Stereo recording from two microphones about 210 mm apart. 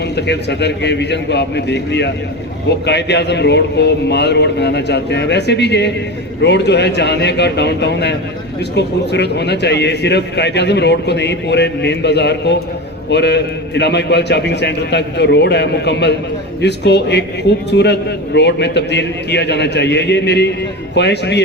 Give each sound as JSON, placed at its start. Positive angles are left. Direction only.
{"t": 0.0, "sound": "a man's voice", "side_deg": 55}